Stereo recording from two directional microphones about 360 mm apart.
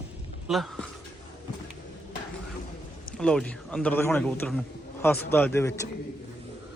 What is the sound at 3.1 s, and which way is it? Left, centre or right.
A man's voice, centre.